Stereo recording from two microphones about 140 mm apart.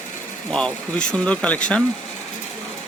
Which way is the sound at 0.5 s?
5° left (ahead or behind).